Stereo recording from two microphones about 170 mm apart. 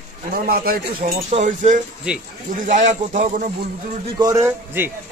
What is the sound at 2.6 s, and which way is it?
Speech, 45° right (ahead or behind).